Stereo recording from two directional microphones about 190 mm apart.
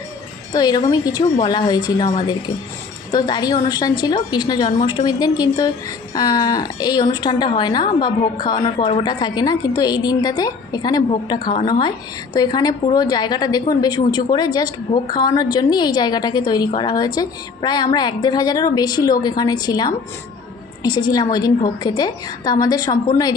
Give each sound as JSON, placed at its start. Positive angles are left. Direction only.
{"t": 0.5, "sound": "a woman's voice", "side_deg": 20}
{"t": 3.1, "sound": "a woman's voice", "side_deg": 20}